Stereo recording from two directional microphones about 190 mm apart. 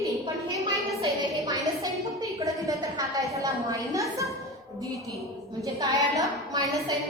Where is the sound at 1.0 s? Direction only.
20° right (ahead or behind).